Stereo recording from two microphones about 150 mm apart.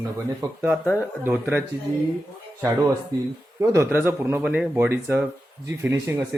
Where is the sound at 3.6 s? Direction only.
15° right (ahead or behind).